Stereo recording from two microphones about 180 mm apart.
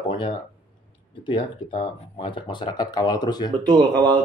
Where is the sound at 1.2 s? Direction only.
30° left (ahead or behind).